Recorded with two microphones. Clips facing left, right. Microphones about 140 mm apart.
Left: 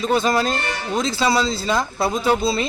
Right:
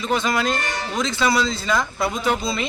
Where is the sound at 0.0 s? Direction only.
35° left (ahead or behind).